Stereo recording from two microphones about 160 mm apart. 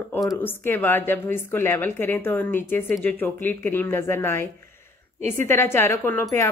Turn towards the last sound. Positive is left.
turn(degrees=15)  # may be behind; listen again after turning